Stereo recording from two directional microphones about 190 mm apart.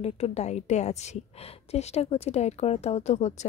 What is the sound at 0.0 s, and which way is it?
A woman's voice, 35° left (ahead or behind).